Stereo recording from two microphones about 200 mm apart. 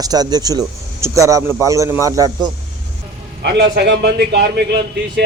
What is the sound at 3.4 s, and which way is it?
A man's voice, 55° right (ahead or behind).